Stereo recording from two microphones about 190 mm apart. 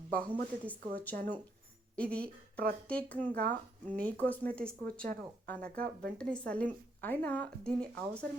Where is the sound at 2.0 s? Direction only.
5° left (ahead or behind).